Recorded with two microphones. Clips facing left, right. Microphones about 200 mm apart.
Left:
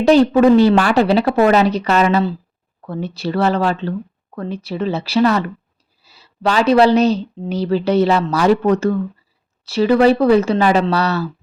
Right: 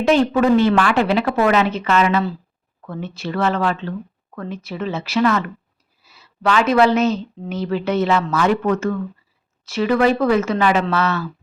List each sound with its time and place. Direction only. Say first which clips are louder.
0.0 s speech: left 5 dB; 35° left (ahead or behind)